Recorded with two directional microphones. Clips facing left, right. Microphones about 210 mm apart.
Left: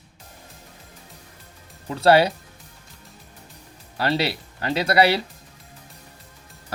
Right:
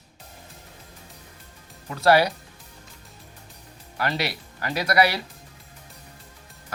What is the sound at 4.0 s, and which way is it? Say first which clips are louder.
Speech: left 4 dB; 30° left (ahead or behind).